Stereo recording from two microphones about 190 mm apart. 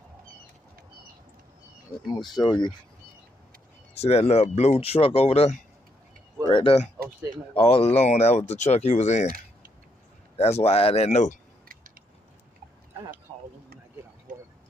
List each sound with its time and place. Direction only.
2.0 s speech: 25° left (ahead or behind)
3.9 s speech: 35° left (ahead or behind)
10.3 s speech: 35° left (ahead or behind)